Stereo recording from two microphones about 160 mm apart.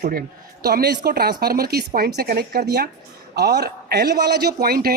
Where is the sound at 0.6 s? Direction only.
85° right.